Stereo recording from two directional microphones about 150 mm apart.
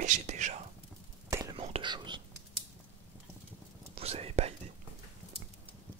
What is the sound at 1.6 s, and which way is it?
Whispering, 35° right (ahead or behind).